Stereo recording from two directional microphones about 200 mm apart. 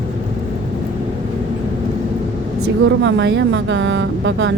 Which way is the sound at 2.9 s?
65° right (ahead or behind).